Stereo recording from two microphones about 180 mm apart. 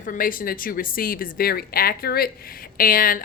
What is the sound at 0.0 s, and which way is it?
Speech, 50° left (ahead or behind).